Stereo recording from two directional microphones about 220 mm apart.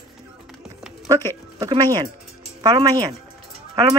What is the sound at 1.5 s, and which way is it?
Speech, 20° right (ahead or behind).